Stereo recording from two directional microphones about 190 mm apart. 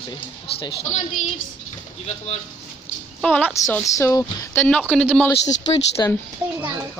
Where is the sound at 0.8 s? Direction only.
40° left (ahead or behind).